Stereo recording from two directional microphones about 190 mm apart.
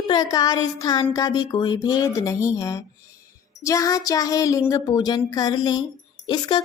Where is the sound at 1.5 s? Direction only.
25° left (ahead or behind).